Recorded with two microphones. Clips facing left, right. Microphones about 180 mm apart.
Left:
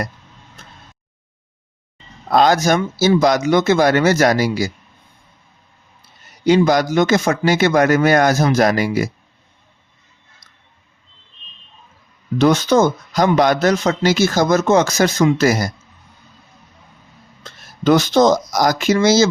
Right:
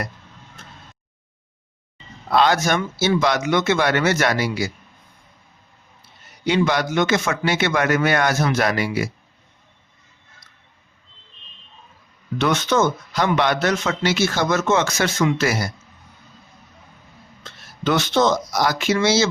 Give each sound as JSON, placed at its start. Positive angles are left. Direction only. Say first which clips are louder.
{"t": 2.3, "sound": "speech", "louder": "left 4 dB", "side_deg": 40}
{"t": 6.4, "sound": "speech", "louder": "left 6 dB", "side_deg": 40}
{"t": 12.4, "sound": "speech", "louder": "left 6 dB", "side_deg": 35}
{"t": 17.4, "sound": "speech", "louder": "left 7 dB", "side_deg": 40}